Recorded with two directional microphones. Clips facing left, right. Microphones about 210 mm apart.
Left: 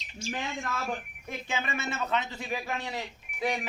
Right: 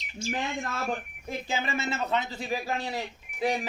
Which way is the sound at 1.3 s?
30° right (ahead or behind).